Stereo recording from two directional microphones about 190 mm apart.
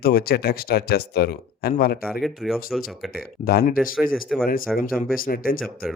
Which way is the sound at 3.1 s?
55° left (ahead or behind).